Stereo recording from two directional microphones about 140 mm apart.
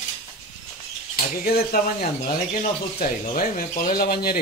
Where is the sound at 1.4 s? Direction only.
90° left.